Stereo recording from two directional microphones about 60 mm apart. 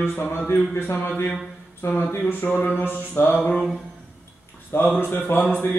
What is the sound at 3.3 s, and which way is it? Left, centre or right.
Mantra, centre.